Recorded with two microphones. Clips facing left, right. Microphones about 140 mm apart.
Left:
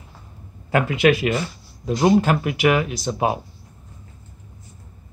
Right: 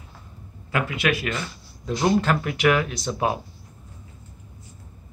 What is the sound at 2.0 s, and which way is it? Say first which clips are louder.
Speech: left 4 dB; 10° left (ahead or behind).